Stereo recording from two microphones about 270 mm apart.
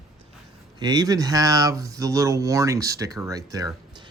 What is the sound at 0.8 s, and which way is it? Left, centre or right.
Speech, centre.